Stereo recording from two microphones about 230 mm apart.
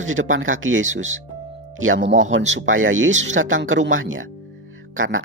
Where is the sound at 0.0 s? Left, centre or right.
Right.